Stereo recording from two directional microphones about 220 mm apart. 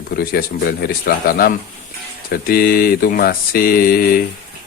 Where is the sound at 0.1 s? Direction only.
45° left (ahead or behind).